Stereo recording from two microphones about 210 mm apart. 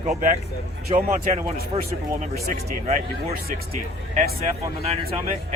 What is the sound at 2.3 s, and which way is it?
Speech, 45° right (ahead or behind).